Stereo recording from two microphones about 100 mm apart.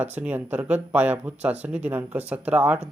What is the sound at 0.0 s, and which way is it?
Speech, 20° right (ahead or behind).